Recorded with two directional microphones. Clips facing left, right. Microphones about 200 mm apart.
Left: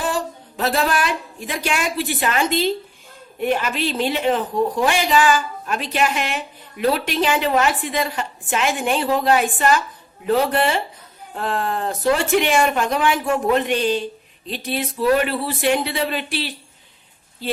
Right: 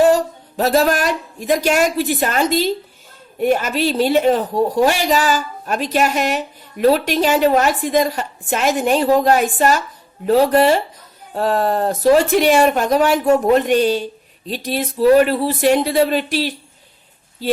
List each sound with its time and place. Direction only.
0.0 s a woman's voice: 40° right (ahead or behind)